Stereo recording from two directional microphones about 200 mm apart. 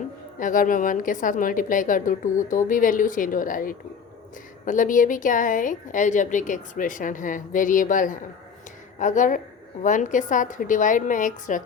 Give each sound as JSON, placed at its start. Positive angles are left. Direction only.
{"t": 0.3, "sound": "a woman's voice", "side_deg": 40}